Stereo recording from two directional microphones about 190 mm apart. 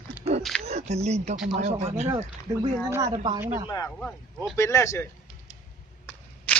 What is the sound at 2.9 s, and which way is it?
Speech, 15° right (ahead or behind).